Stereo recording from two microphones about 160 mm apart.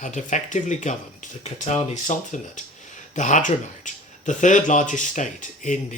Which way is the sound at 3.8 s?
50° left (ahead or behind).